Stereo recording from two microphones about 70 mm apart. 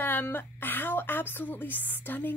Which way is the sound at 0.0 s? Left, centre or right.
Left.